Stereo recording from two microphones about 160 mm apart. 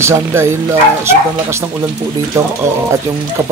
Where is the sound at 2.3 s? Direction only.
20° right (ahead or behind).